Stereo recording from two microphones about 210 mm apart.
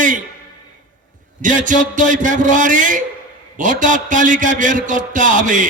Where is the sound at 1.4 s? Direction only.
40° right (ahead or behind).